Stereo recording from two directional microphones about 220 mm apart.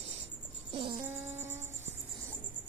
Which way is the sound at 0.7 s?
20° right (ahead or behind).